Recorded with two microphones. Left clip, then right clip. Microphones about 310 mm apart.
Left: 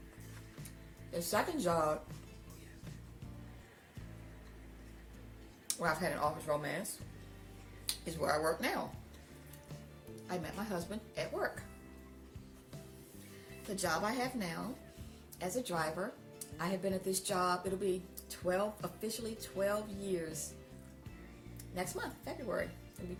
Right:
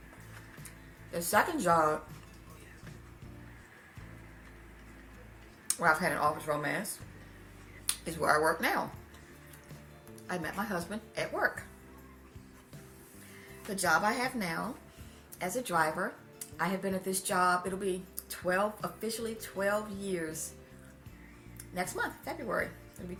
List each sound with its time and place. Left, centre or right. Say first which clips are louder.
1.1 s speech: right 6 dB; left
5.6 s speech: right 7 dB; left
7.9 s speech: right 6 dB; left
10.2 s speech: right 6 dB; left
13.7 s speech: right 7 dB; left
21.8 s speech: right 6 dB; left